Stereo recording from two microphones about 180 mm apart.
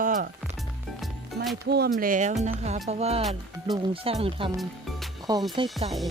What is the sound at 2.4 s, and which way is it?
Music, 40° right (ahead or behind).